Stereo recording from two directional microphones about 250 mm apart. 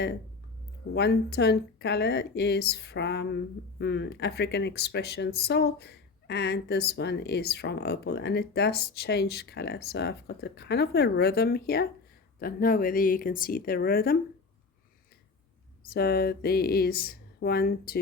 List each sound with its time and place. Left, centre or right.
0.9 s speech: left
15.9 s speech: left